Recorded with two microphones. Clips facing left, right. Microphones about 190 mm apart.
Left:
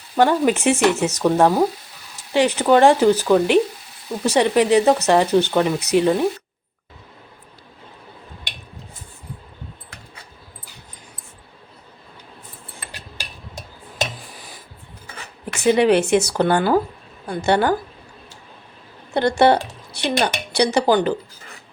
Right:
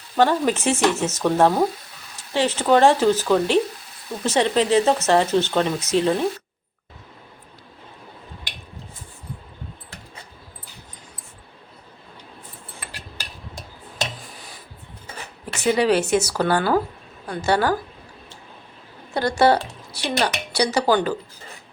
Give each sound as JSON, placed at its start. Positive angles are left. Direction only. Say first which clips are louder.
{"t": 0.2, "sound": "speech", "louder": "left 2 dB", "side_deg": 15}
{"t": 15.6, "sound": "speech", "louder": "left 3 dB", "side_deg": 20}
{"t": 19.1, "sound": "speech", "louder": "left 2 dB", "side_deg": 25}